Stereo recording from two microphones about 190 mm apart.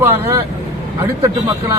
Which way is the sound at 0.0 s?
15° right (ahead or behind).